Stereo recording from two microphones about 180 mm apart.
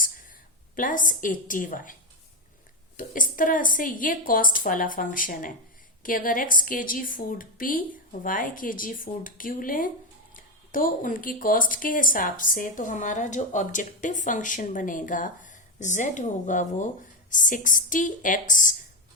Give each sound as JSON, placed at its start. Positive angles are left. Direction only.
{"t": 0.8, "sound": "speech", "side_deg": 50}
{"t": 3.0, "sound": "speech", "side_deg": 50}